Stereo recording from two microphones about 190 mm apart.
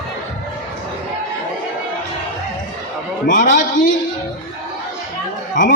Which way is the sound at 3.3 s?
45° left (ahead or behind).